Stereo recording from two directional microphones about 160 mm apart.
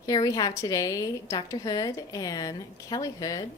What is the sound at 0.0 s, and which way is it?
A woman's voice, 25° left (ahead or behind).